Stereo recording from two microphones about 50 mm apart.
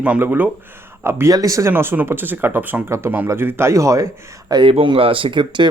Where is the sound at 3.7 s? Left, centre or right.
Right.